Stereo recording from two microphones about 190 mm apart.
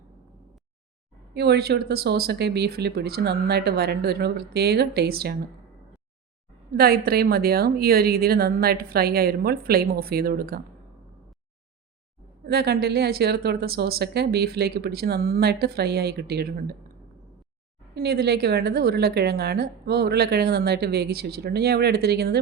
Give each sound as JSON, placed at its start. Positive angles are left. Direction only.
{"t": 1.3, "sound": "a woman's voice", "side_deg": -60}
{"t": 6.7, "sound": "a woman's voice", "side_deg": -55}
{"t": 12.5, "sound": "a woman's voice", "side_deg": -55}
{"t": 17.9, "sound": "a woman's voice", "side_deg": -55}